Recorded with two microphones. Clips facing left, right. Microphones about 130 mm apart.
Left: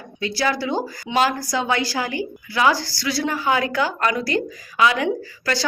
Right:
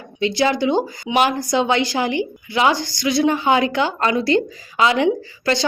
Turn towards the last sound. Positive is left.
turn(degrees=-25)  # may be behind; listen again after turning